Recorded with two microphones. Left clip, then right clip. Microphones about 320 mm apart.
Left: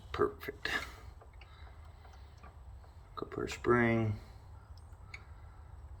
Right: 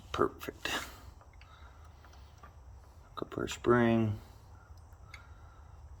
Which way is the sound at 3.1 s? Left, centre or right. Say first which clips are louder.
Right 1 dB; centre.